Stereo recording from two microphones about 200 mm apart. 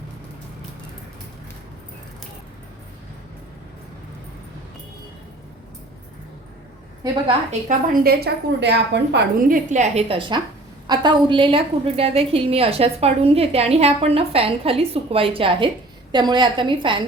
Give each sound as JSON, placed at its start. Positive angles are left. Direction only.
{"t": 7.7, "sound": "a woman's voice", "side_deg": -50}
{"t": 9.5, "sound": "a woman's voice", "side_deg": -35}